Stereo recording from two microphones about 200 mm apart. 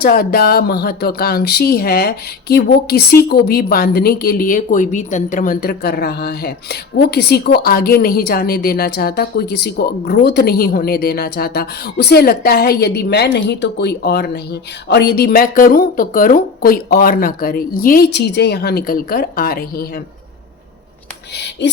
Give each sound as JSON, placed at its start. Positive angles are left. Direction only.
{"t": 0.0, "sound": "speech", "side_deg": 50}